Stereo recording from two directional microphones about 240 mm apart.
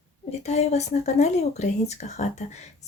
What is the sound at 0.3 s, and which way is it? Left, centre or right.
Speech, left.